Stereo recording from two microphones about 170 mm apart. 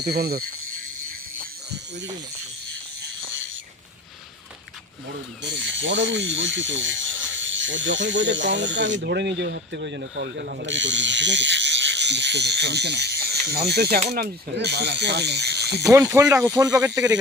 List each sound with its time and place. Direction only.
0.0 s speech: 65° right (ahead or behind)
5.4 s speech: 90° right; by 15.8 s 75° right (ahead or behind)
15.8 s speech: 20° right (ahead or behind)